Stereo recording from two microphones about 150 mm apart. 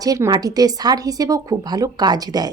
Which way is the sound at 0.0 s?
25° right (ahead or behind).